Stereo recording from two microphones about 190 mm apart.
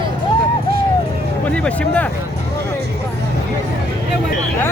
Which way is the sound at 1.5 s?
5° left (ahead or behind).